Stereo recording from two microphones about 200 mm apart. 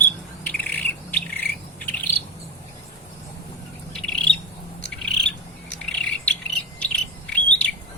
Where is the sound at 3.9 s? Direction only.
5° left (ahead or behind).